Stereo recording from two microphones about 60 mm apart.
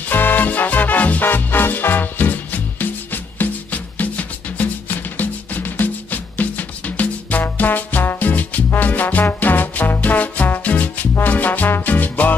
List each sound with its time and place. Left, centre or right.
0.1 s music: left